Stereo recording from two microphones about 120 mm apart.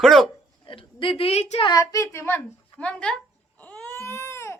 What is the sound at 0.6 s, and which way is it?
A woman's voice, 45° left (ahead or behind).